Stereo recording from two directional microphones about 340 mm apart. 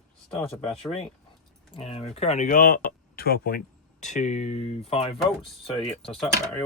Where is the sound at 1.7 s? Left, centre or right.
Centre.